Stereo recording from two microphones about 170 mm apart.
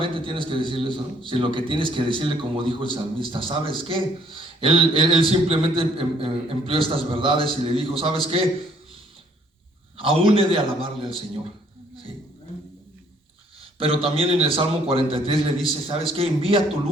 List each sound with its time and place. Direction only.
0.0 s a man's voice: 30° right (ahead or behind)
10.0 s a man's voice: 30° right (ahead or behind)
13.7 s a man's voice: 35° right (ahead or behind)